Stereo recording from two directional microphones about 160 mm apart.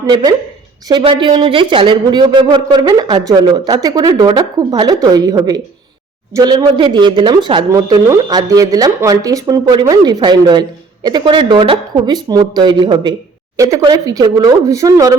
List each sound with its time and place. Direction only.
0.0 s speech: 25° right (ahead or behind)